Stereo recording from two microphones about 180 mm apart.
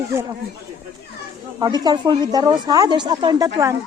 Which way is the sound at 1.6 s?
25° right (ahead or behind).